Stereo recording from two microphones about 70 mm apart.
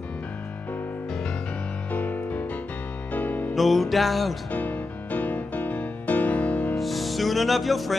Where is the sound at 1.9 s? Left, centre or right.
Left.